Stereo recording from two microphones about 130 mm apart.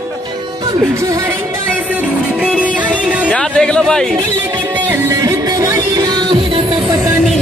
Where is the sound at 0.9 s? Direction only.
25° right (ahead or behind).